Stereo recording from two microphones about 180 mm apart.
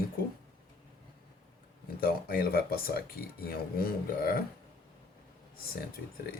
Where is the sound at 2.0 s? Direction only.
55° left (ahead or behind).